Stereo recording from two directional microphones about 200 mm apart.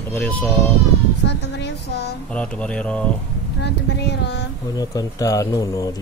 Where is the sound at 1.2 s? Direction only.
55° left (ahead or behind).